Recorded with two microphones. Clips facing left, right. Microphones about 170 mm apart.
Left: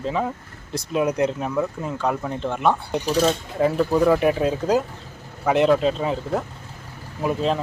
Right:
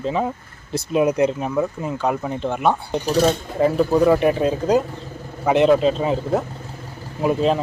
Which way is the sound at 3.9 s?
5° right (ahead or behind).